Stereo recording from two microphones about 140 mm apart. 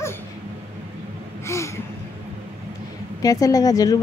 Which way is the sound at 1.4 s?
20° left (ahead or behind).